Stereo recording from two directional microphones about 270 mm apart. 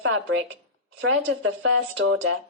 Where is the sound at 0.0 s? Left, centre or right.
Right.